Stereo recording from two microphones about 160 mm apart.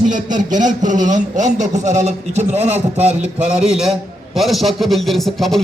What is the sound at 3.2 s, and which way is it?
A man's voice, 5° right (ahead or behind).